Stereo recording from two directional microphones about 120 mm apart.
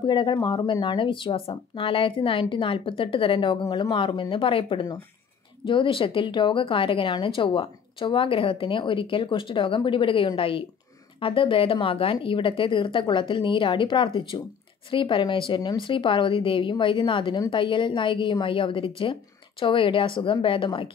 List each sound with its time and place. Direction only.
0.0 s speech: 40° left (ahead or behind)